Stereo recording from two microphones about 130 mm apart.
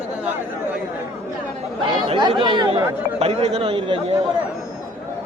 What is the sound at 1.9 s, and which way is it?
Speech, 40° right (ahead or behind).